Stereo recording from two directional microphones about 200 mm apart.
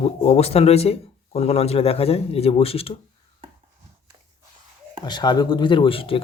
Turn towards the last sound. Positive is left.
turn(degrees=25)  # may be behind; listen again after turning